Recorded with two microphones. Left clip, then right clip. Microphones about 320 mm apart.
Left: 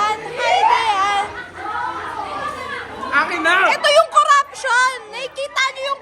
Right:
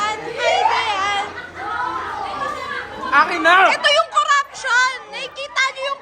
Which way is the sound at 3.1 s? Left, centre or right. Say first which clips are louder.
Right 3 dB; right.